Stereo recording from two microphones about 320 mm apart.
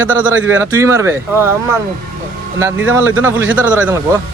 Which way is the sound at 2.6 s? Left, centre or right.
Centre.